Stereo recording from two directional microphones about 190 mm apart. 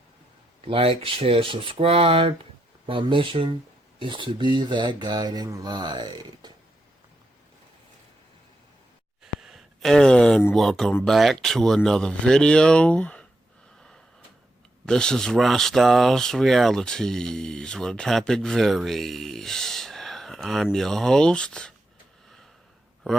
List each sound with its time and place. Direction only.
0.6 s speech: 30° right (ahead or behind)
9.2 s speech: centre (ahead or behind)
14.8 s speech: 5° left (ahead or behind)